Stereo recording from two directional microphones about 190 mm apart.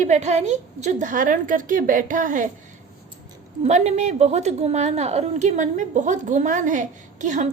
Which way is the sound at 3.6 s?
35° right (ahead or behind).